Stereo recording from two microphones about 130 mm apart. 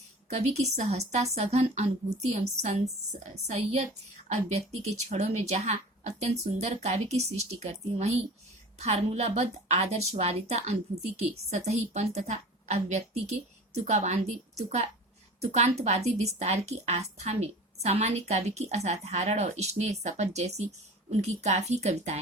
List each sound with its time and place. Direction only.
0.3 s a woman's voice: 55° right (ahead or behind)